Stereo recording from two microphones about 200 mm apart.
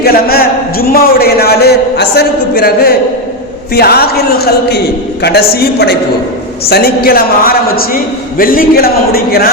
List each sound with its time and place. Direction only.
0.0 s a man's voice: 50° left (ahead or behind)